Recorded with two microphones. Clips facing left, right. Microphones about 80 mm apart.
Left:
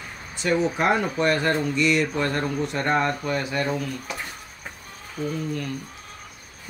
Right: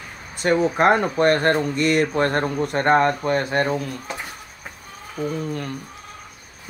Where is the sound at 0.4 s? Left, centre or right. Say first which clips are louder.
Right 4 dB; right.